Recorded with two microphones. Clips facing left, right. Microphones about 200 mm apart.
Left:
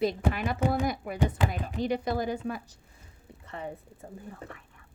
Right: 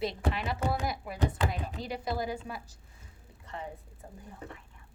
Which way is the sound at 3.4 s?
60° left (ahead or behind).